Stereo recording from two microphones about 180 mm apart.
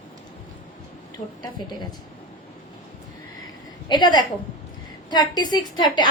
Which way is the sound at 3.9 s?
25° left (ahead or behind).